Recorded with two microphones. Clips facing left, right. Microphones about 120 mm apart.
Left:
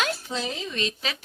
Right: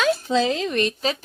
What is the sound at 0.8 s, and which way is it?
Speech, 45° right (ahead or behind).